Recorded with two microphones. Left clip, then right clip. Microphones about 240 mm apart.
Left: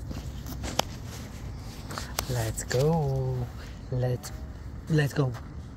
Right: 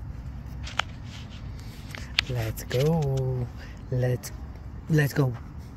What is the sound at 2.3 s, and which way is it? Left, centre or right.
Speech, centre.